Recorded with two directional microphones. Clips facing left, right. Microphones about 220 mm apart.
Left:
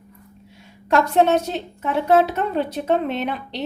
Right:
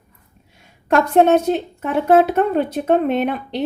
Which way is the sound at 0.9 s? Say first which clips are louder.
Right 3 dB; 55° right (ahead or behind).